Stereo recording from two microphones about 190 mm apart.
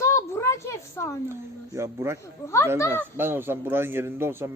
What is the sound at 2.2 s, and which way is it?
Speech, 15° left (ahead or behind).